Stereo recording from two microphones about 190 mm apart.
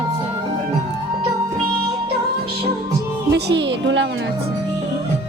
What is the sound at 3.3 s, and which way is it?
Speech, 65° right (ahead or behind).